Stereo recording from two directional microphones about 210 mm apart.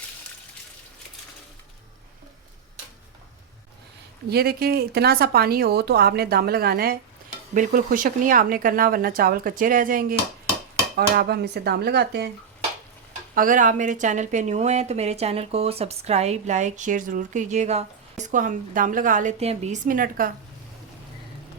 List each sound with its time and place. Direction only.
4.3 s speech: 45° right (ahead or behind)
13.3 s speech: 40° right (ahead or behind)